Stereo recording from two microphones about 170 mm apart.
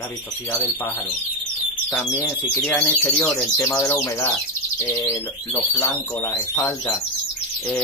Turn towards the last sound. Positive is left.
turn(degrees=20)  # may be behind; listen again after turning